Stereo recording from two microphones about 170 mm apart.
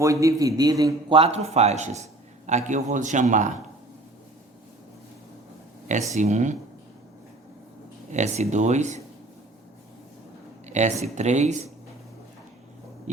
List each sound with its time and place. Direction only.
0.0 s a man's voice: 20° right (ahead or behind)
1.1 s speech: 35° right (ahead or behind)
6.1 s speech: 45° right (ahead or behind)
8.1 s speech: 45° right (ahead or behind)
10.7 s speech: 45° right (ahead or behind)